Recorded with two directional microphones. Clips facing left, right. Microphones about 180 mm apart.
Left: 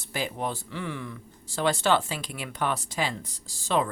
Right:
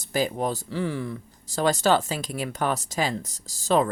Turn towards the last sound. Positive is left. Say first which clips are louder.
# right 4 dB
turn(degrees=-40)  # may be behind; listen again after turning